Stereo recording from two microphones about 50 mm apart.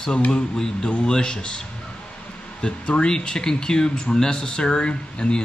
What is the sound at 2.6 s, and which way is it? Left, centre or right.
Speech, centre.